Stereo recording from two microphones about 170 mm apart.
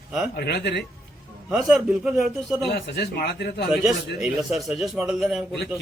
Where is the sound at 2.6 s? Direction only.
65° left (ahead or behind).